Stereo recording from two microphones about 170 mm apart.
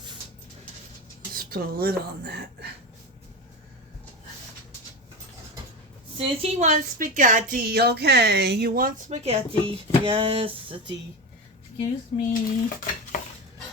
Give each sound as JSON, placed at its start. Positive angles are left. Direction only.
{"t": 1.3, "sound": "speech", "side_deg": -60}
{"t": 6.1, "sound": "a woman's voice", "side_deg": -35}
{"t": 12.3, "sound": "stir", "side_deg": 50}